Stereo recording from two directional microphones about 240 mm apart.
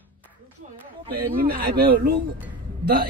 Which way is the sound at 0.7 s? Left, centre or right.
Right.